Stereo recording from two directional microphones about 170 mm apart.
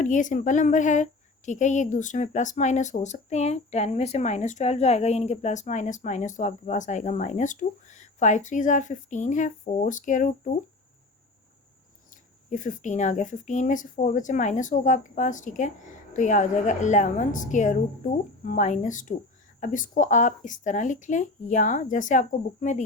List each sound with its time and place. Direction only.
0.0 s a woman's voice: 50° left (ahead or behind)
12.5 s a woman's voice: 50° left (ahead or behind)